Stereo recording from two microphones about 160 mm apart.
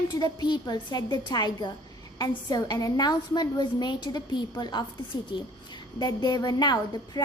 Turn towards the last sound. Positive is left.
turn(degrees=25)  # may be behind; listen again after turning